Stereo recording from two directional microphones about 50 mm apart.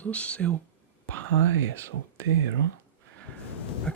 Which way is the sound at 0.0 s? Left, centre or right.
Left.